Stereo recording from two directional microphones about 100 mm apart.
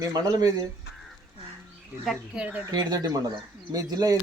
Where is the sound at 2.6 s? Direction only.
40° right (ahead or behind).